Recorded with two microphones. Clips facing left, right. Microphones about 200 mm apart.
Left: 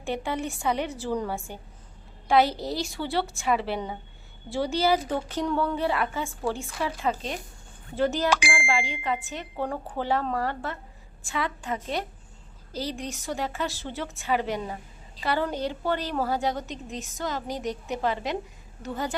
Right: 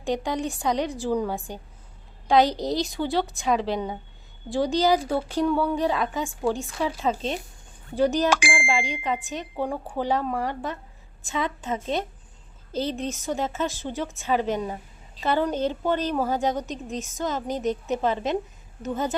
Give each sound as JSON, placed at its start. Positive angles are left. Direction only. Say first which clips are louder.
{"t": 0.0, "sound": "a woman's voice", "louder": "right 3 dB", "side_deg": -15}
{"t": 3.4, "sound": "a woman's voice", "louder": "right 2 dB", "side_deg": 10}
{"t": 4.4, "sound": "a woman's voice", "louder": "right 3 dB", "side_deg": -15}